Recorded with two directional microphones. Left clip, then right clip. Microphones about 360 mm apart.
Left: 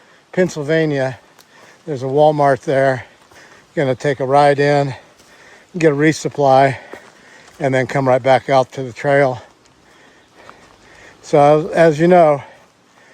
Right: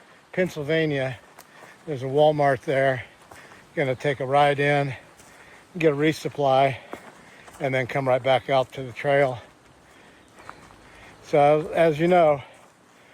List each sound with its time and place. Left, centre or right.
0.4 s speech: left
0.7 s speech: left
11.3 s speech: left